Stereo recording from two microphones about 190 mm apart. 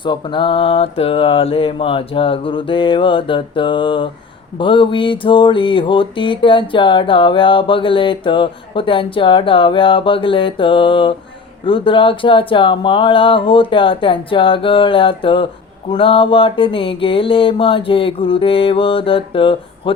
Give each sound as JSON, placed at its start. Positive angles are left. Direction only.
{"t": 0.0, "sound": "mantra", "side_deg": 25}